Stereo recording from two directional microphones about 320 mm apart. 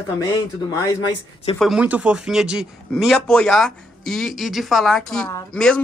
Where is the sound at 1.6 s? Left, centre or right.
Centre.